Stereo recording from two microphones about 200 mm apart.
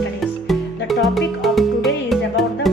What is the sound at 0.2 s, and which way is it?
Music, centre (ahead or behind).